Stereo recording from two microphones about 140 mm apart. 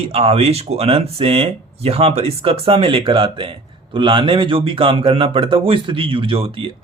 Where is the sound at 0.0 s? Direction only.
45° right (ahead or behind).